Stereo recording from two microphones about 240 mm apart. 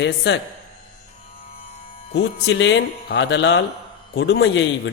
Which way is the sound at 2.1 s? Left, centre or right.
Left.